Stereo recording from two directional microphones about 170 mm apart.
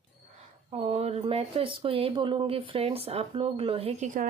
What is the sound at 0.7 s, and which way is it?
Speech, 40° right (ahead or behind).